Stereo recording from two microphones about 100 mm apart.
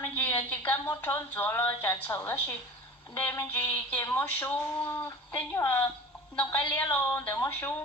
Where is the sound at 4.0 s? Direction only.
20° left (ahead or behind).